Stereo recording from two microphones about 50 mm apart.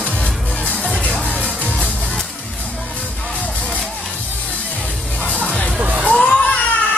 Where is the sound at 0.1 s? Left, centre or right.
Left.